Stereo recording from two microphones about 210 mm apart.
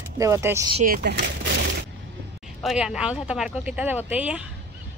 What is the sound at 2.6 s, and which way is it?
Speech, centre (ahead or behind).